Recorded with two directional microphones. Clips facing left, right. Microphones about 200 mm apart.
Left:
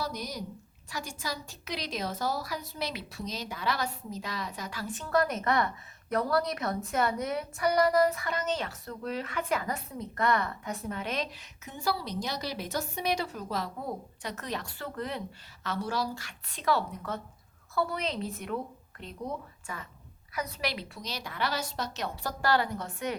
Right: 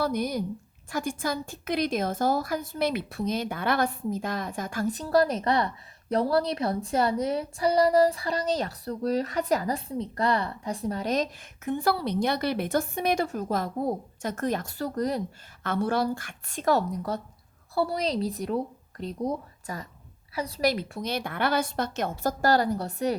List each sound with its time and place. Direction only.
0.0 s a woman's voice: 55° right (ahead or behind); by 15.2 s 40° right (ahead or behind)
15.6 s a woman's voice: 55° right (ahead or behind); by 23.1 s 35° right (ahead or behind)